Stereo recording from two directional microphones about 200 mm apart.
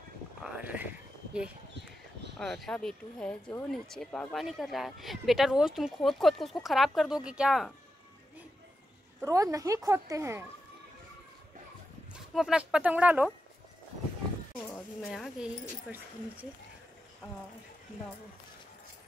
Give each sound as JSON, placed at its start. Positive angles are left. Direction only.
{"t": 0.4, "sound": "a sound", "side_deg": -10}
{"t": 2.3, "sound": "speech", "side_deg": 0}
{"t": 9.2, "sound": "a woman's voice", "side_deg": -15}
{"t": 12.1, "sound": "speech", "side_deg": -5}
{"t": 14.7, "sound": "speech", "side_deg": 0}